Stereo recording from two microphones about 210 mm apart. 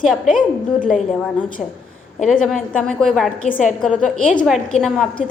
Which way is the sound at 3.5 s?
40° left (ahead or behind).